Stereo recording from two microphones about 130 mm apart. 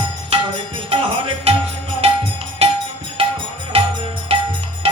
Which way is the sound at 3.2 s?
45° right (ahead or behind).